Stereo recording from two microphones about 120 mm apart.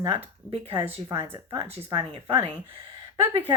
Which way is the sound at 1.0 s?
25° right (ahead or behind).